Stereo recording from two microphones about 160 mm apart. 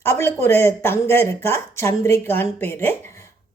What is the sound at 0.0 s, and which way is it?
A woman's voice, 15° left (ahead or behind).